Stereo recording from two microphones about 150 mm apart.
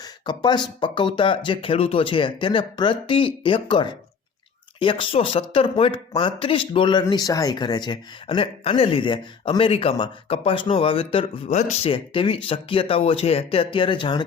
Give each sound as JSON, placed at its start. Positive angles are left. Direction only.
{"t": 0.0, "sound": "speech", "side_deg": 30}
{"t": 7.0, "sound": "speech", "side_deg": 25}